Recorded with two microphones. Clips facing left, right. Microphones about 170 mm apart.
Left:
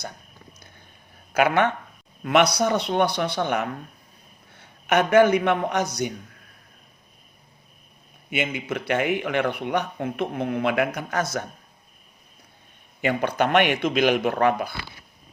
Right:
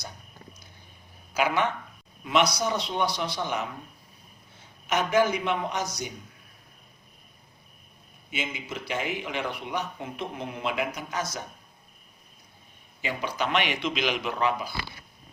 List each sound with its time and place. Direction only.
1.3 s a man's voice: 60° left (ahead or behind)
8.3 s speech: 60° left (ahead or behind)
13.0 s speech: 60° left (ahead or behind)